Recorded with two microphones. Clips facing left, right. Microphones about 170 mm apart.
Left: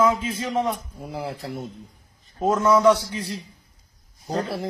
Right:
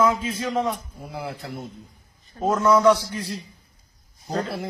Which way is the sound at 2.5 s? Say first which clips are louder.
Even; 15° left (ahead or behind).